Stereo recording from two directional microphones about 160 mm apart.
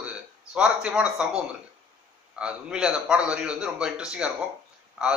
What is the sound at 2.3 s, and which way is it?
A man's voice, 5° right (ahead or behind).